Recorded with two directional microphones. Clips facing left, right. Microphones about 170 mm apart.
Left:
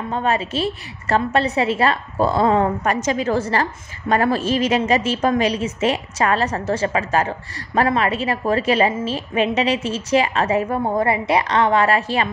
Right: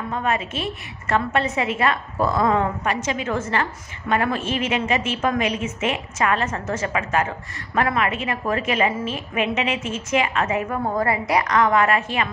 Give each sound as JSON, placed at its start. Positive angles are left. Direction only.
{"t": 0.1, "sound": "a woman's voice", "side_deg": 30}